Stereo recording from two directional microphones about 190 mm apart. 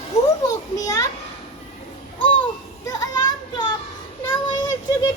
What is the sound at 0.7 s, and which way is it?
Speech, 20° left (ahead or behind).